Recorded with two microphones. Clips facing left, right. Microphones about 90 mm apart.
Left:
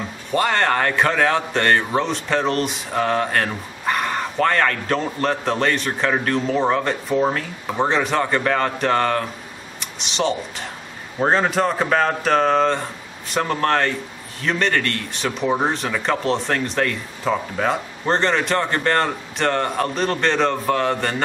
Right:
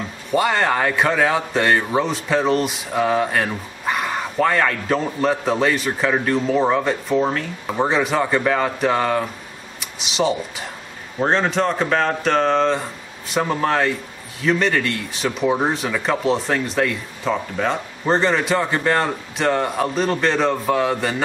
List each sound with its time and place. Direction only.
0.3 s speech: 5° right (ahead or behind)